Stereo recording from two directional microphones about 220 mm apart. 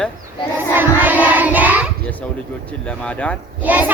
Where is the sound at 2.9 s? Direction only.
5° left (ahead or behind).